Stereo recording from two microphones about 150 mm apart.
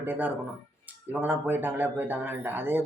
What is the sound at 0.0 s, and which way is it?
Speech, 10° right (ahead or behind).